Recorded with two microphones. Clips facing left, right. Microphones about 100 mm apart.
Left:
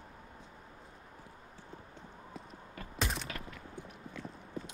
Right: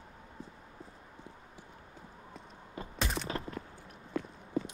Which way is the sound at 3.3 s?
35° right (ahead or behind).